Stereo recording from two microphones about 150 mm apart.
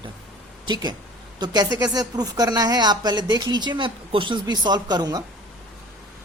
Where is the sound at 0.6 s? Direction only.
30° right (ahead or behind).